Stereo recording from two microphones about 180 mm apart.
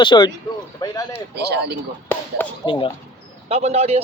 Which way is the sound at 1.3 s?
65° right (ahead or behind).